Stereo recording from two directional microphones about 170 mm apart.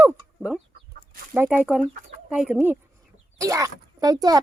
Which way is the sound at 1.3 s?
10° right (ahead or behind).